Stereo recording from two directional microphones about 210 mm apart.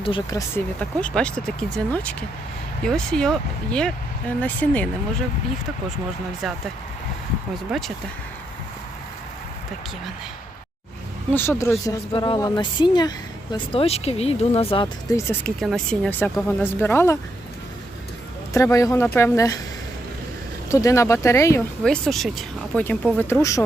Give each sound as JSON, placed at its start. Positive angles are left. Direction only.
{"t": 0.0, "sound": "speech", "side_deg": 20}
{"t": 6.4, "sound": "speech", "side_deg": 0}
{"t": 7.7, "sound": "speech", "side_deg": 0}
{"t": 11.3, "sound": "speech", "side_deg": 10}
{"t": 11.9, "sound": "speech", "side_deg": 20}
{"t": 15.1, "sound": "speech", "side_deg": 5}
{"t": 18.5, "sound": "speech", "side_deg": 15}
{"t": 20.7, "sound": "speech", "side_deg": 15}
{"t": 21.8, "sound": "speech", "side_deg": 0}